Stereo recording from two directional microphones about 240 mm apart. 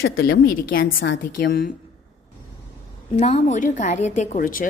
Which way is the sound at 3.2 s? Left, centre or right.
Left.